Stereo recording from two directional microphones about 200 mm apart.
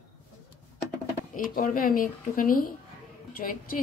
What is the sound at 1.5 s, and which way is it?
Speech, 45° left (ahead or behind).